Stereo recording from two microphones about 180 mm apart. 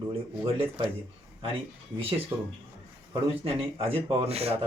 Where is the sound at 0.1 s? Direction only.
30° right (ahead or behind).